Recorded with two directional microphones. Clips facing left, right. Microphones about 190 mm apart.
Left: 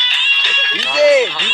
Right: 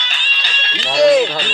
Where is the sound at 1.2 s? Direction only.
40° right (ahead or behind).